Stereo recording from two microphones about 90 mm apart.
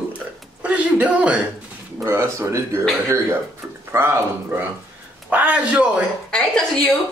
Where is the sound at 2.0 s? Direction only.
30° right (ahead or behind).